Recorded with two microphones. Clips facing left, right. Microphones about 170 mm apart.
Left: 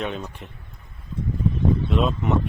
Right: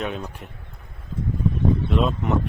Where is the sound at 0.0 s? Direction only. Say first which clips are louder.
Even; centre (ahead or behind).